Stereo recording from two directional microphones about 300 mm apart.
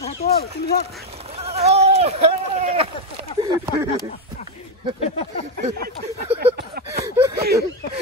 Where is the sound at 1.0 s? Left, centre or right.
Centre.